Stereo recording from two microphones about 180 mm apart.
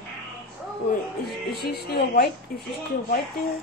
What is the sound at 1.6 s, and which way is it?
Speech, 60° left (ahead or behind).